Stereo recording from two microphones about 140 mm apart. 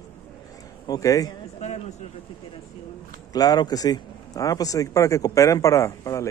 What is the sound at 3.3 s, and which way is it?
Speech, 25° left (ahead or behind).